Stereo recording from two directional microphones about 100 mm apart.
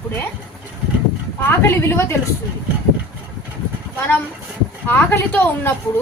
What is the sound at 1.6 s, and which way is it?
Speech, 25° left (ahead or behind).